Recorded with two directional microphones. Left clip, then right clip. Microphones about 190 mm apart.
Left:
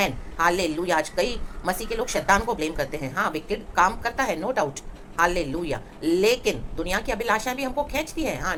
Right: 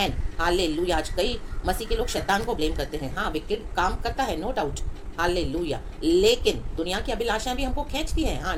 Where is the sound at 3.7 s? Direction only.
10° left (ahead or behind).